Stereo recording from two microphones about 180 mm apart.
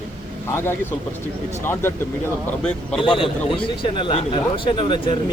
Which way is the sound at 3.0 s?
30° left (ahead or behind).